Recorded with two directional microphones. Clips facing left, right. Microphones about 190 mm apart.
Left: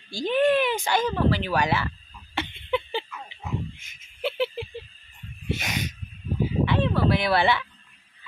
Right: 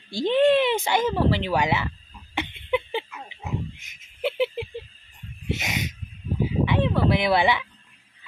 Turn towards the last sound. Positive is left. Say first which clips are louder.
# right 1 dB
turn(degrees=-15)  # may be behind; listen again after turning